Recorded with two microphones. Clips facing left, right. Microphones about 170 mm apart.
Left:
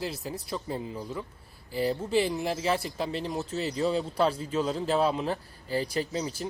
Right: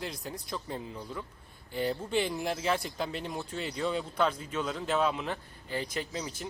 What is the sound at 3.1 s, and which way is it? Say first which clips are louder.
Speech: left 5 dB; 35° left (ahead or behind).